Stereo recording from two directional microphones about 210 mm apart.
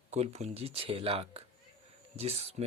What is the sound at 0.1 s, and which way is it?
Speech, 30° right (ahead or behind).